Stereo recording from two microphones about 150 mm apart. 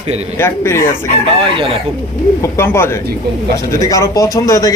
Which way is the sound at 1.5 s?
35° right (ahead or behind).